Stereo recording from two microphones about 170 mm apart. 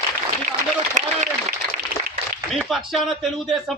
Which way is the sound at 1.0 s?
45° right (ahead or behind).